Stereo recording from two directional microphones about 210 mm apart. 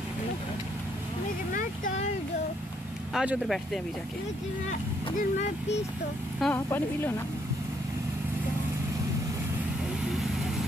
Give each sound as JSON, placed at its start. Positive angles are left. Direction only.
{"t": 1.5, "sound": "vehicle", "side_deg": 40}
{"t": 3.1, "sound": "speech", "side_deg": 0}
{"t": 4.6, "sound": "speech", "side_deg": 35}
{"t": 6.4, "sound": "speech", "side_deg": 10}
{"t": 10.1, "sound": "vehicle", "side_deg": 0}